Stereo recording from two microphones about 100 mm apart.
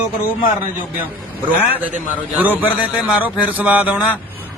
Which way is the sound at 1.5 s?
15° right (ahead or behind).